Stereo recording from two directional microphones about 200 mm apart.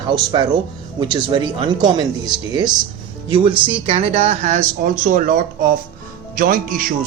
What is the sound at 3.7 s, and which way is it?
Speech, 30° right (ahead or behind).